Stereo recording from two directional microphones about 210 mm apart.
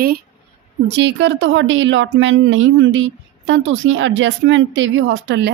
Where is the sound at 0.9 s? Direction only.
55° right (ahead or behind).